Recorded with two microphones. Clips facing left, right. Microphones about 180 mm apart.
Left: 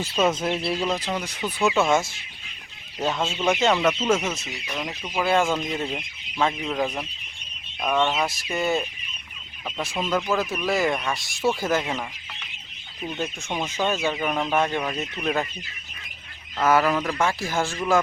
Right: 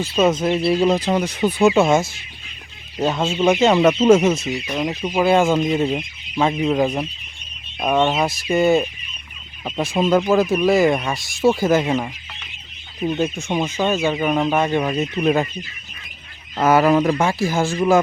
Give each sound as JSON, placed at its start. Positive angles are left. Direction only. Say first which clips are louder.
{"t": 0.3, "sound": "speech", "louder": "right 7 dB", "side_deg": 0}
{"t": 0.8, "sound": "speech", "louder": "right 9 dB", "side_deg": -35}
{"t": 1.2, "sound": "speech", "louder": "right 10 dB", "side_deg": -20}
{"t": 1.5, "sound": "speech", "louder": "right 8 dB", "side_deg": -35}
{"t": 3.0, "sound": "speech", "louder": "right 6 dB", "side_deg": -5}
{"t": 4.0, "sound": "speech", "louder": "right 10 dB", "side_deg": -30}
{"t": 8.4, "sound": "speech", "louder": "right 12 dB", "side_deg": -15}
{"t": 10.6, "sound": "speech", "louder": "right 8 dB", "side_deg": -15}
{"t": 11.1, "sound": "speech", "louder": "right 7 dB", "side_deg": -10}
{"t": 13.9, "sound": "speech", "louder": "right 6 dB", "side_deg": -5}
{"t": 16.6, "sound": "speech", "louder": "right 6 dB", "side_deg": -20}
{"t": 17.2, "sound": "speech", "louder": "right 5 dB", "side_deg": -10}